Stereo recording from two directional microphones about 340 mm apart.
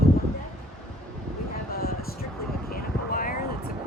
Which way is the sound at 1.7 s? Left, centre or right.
Left.